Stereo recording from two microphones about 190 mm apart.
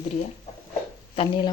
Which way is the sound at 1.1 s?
25° left (ahead or behind).